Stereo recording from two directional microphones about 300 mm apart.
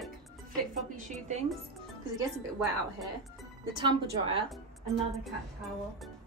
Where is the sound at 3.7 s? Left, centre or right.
Centre.